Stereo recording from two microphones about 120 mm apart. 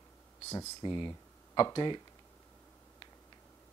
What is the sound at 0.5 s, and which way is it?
Speech, 35° left (ahead or behind).